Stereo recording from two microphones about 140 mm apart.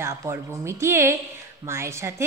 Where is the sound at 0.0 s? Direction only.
20° right (ahead or behind).